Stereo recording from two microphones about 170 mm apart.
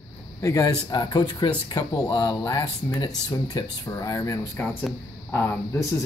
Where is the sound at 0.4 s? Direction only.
20° left (ahead or behind).